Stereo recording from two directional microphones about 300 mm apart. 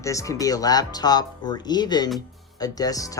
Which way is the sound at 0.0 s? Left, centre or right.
Centre.